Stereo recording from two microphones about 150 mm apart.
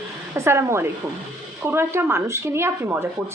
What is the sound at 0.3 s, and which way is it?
Speech, 20° right (ahead or behind).